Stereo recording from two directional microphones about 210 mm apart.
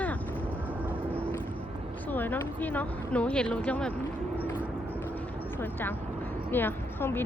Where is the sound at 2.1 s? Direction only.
10° left (ahead or behind).